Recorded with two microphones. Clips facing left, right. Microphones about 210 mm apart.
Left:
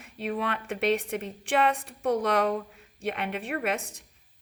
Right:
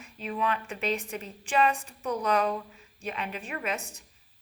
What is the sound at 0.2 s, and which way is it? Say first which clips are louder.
Speech: left 1 dB; 65° left (ahead or behind).